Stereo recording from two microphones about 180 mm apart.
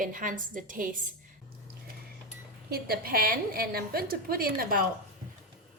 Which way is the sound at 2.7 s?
60° right (ahead or behind).